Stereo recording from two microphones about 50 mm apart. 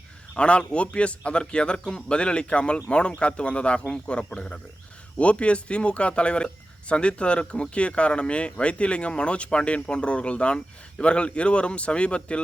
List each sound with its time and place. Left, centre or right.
0.3 s a man's voice: left